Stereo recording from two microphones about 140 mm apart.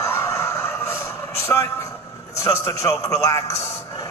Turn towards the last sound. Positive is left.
turn(degrees=20)  # may be behind; listen again after turning